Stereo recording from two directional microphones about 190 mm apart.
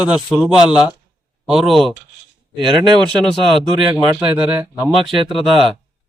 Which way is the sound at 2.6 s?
25° right (ahead or behind).